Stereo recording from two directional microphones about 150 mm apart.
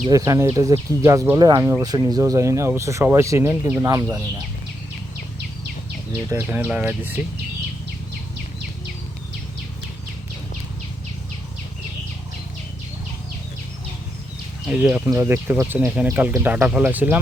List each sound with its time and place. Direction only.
0.1 s speech: 20° right (ahead or behind)
6.1 s speech: 15° right (ahead or behind)
14.7 s speech: 10° right (ahead or behind)